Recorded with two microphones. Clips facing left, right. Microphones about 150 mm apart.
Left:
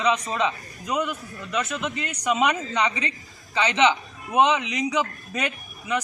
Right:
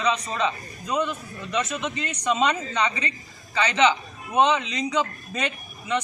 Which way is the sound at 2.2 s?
15° left (ahead or behind).